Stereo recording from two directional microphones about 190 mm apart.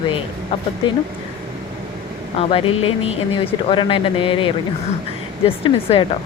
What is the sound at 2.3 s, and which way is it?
Speech, 30° left (ahead or behind).